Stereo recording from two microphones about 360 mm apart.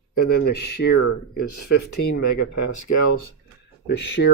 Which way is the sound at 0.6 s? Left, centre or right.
Left.